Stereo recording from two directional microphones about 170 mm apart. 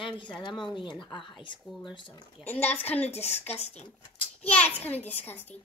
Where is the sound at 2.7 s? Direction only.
10° left (ahead or behind).